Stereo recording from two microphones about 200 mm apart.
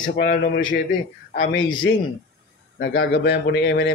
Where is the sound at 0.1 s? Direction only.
45° left (ahead or behind).